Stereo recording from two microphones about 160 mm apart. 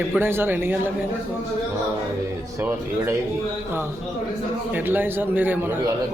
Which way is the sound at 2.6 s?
15° right (ahead or behind).